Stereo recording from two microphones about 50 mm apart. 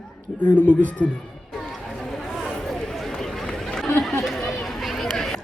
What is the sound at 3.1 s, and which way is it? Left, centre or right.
Run, centre.